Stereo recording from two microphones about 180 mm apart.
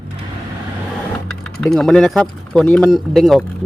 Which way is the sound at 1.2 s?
5° left (ahead or behind).